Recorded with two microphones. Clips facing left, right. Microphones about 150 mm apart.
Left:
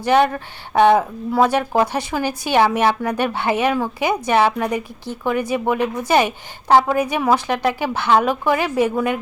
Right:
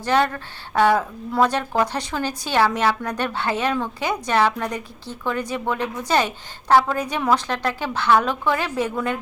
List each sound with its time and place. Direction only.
0.0 s a woman's voice: 15° left (ahead or behind)
1.3 s a woman's voice: 10° left (ahead or behind)